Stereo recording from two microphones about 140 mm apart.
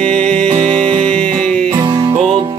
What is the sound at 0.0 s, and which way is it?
Music, 5° left (ahead or behind).